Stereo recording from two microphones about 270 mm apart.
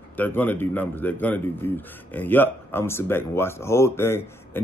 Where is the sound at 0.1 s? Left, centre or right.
Centre.